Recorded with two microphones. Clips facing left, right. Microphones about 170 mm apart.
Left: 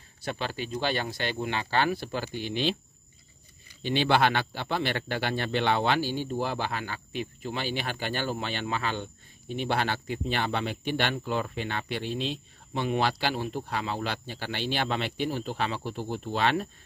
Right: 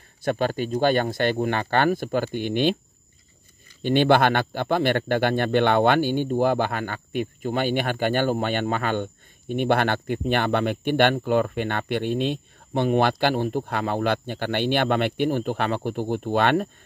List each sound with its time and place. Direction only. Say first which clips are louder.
0.2 s speech: right 9 dB; 50° right (ahead or behind)
3.8 s speech: right 6 dB; 50° right (ahead or behind)